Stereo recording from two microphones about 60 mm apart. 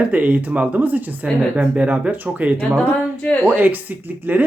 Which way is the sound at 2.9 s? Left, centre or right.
Left.